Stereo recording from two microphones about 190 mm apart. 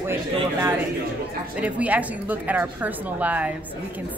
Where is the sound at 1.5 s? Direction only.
5° right (ahead or behind).